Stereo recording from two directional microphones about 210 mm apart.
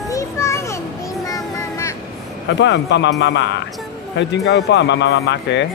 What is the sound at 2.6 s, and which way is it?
Speech, 55° left (ahead or behind).